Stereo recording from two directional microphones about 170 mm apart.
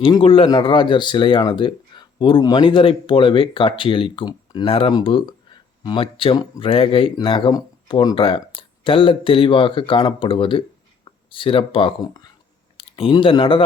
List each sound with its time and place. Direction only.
0.0 s speech: 30° left (ahead or behind)